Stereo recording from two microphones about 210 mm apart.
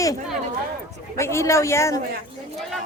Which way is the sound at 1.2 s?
15° left (ahead or behind).